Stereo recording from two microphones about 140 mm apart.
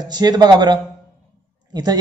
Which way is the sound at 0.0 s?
30° right (ahead or behind).